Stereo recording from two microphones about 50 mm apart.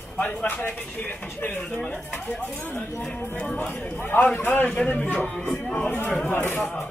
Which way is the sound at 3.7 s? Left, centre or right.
Left.